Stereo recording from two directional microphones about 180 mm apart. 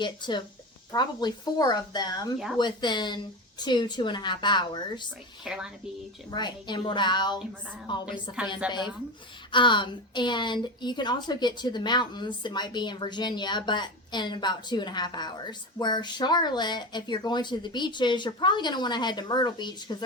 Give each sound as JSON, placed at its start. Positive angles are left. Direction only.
{"t": 0.0, "sound": "a woman's voice", "side_deg": 25}
{"t": 5.5, "sound": "speech", "side_deg": -5}
{"t": 6.3, "sound": "a woman's voice", "side_deg": 25}
{"t": 8.6, "sound": "speech", "side_deg": -5}
{"t": 9.5, "sound": "a woman's voice", "side_deg": 25}